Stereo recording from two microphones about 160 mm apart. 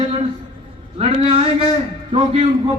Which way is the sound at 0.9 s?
35° right (ahead or behind).